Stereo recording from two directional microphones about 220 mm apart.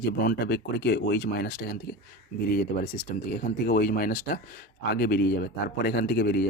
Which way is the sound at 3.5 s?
45° left (ahead or behind).